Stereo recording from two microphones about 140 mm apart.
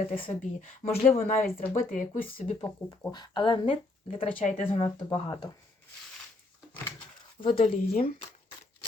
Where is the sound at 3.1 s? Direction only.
30° left (ahead or behind).